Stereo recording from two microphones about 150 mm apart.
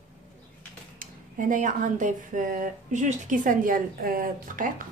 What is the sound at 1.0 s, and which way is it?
Speech, 60° right (ahead or behind).